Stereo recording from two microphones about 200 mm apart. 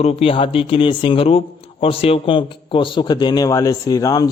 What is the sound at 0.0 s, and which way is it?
A man's voice, 30° left (ahead or behind).